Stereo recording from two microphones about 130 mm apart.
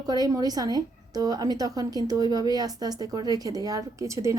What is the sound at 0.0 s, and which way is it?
A woman's voice, 30° right (ahead or behind).